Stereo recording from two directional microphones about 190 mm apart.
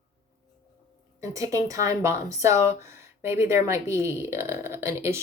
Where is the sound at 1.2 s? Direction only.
15° right (ahead or behind).